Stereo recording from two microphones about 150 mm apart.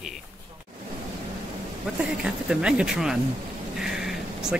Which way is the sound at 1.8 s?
5° right (ahead or behind).